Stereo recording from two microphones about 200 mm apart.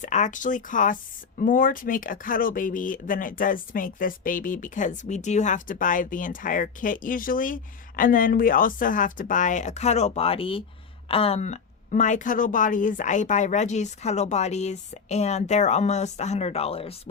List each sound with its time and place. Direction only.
0.0 s a woman's voice: 40° left (ahead or behind)